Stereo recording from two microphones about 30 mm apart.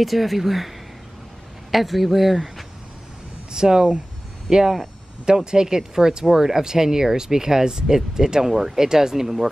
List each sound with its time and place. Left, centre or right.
0.0 s speech: centre
1.7 s speech: centre
3.5 s speech: right